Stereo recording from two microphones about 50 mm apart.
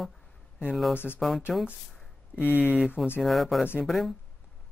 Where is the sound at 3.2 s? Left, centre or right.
Centre.